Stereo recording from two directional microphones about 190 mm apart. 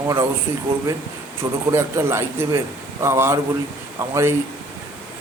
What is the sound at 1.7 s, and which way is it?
A man's voice, 15° right (ahead or behind).